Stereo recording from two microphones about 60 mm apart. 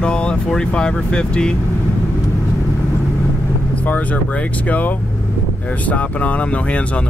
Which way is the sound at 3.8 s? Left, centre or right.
Left.